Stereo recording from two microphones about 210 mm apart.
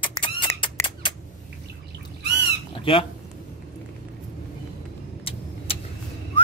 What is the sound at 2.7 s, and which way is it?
Squeak, 25° left (ahead or behind).